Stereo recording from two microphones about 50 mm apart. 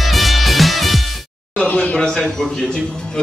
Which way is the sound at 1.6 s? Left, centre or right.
Left.